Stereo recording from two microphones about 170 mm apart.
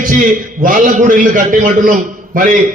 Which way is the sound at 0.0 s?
50° right (ahead or behind).